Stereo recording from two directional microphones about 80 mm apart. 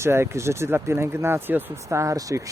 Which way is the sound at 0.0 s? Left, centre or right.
Right.